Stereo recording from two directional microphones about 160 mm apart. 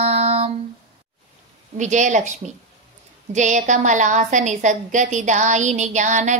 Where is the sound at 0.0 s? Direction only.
40° right (ahead or behind).